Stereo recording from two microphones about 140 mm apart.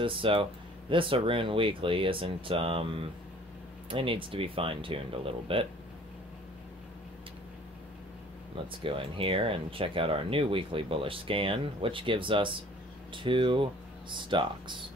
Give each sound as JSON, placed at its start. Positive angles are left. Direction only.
{"t": 0.0, "sound": "speech", "side_deg": -40}
{"t": 8.8, "sound": "speech", "side_deg": -40}